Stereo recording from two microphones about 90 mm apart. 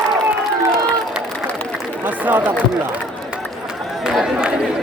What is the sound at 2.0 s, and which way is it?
Speech, 20° right (ahead or behind).